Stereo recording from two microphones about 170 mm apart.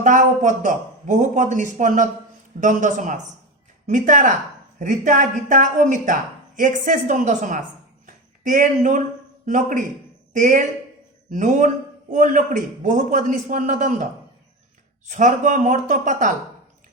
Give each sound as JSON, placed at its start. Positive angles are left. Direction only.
{"t": 0.0, "sound": "speech", "side_deg": -50}
{"t": 8.0, "sound": "a sound", "side_deg": -50}
{"t": 9.5, "sound": "speech", "side_deg": -50}